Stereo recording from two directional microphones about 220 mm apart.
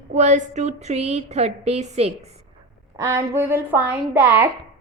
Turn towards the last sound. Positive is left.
turn(degrees=-10)  # may be behind; listen again after turning